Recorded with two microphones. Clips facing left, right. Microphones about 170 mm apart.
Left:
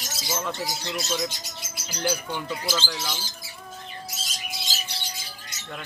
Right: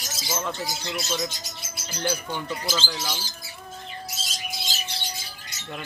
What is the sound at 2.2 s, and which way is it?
Speech, 5° left (ahead or behind).